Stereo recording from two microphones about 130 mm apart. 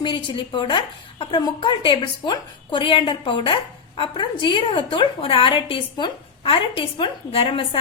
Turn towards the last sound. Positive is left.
turn(degrees=45)  # may be behind; listen again after turning